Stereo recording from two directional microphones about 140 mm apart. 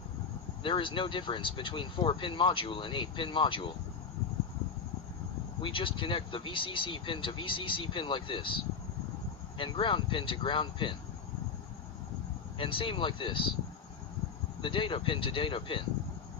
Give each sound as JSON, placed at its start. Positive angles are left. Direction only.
{"t": 0.7, "sound": "speech", "side_deg": 35}
{"t": 5.6, "sound": "speech", "side_deg": 40}
{"t": 12.5, "sound": "speech", "side_deg": 40}
{"t": 14.6, "sound": "speech", "side_deg": 40}